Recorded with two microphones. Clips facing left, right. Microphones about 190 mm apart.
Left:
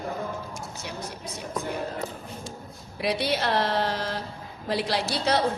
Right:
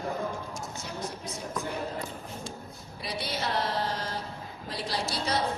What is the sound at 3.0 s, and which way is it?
A woman's voice, 75° left (ahead or behind).